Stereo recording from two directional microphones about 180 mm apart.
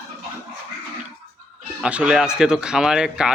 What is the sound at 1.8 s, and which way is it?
Speech, 5° right (ahead or behind).